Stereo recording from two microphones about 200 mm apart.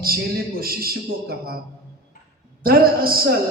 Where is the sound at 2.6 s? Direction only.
50° right (ahead or behind).